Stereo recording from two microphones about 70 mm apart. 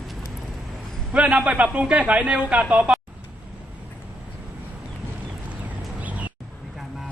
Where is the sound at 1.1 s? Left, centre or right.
Centre.